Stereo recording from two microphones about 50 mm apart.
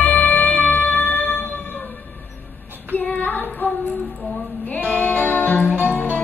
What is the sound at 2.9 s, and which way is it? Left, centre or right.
Child singing, left.